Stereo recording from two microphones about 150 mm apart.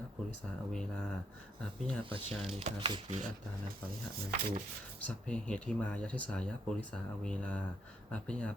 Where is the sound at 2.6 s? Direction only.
35° right (ahead or behind).